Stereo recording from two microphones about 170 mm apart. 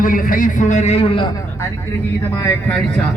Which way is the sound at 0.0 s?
50° left (ahead or behind).